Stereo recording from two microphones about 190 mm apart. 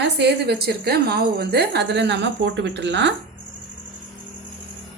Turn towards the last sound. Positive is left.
turn(degrees=-70)  # may be behind; listen again after turning